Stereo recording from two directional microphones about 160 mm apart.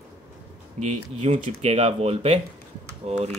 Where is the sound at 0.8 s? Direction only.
40° right (ahead or behind).